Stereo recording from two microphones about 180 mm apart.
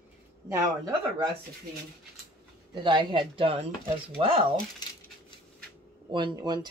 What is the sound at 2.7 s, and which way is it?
Speech, 25° right (ahead or behind).